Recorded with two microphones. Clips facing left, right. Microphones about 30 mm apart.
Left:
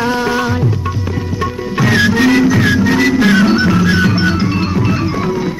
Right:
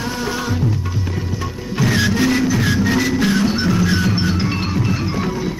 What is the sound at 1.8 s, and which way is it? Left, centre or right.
Music, left.